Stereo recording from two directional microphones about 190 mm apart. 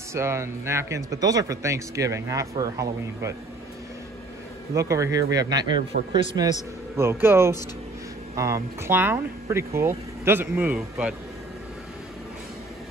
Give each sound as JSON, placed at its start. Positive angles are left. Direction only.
{"t": 0.1, "sound": "speech", "side_deg": -15}
{"t": 4.7, "sound": "speech", "side_deg": -15}